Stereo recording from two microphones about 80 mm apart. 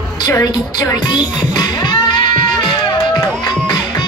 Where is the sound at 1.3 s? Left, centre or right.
Left.